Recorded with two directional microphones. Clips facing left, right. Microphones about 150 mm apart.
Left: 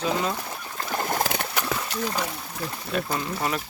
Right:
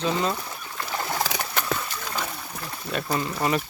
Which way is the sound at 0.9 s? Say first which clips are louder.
Left 2 dB; 50° left (ahead or behind).